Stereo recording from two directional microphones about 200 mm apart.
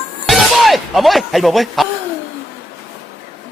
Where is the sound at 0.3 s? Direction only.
Centre (ahead or behind).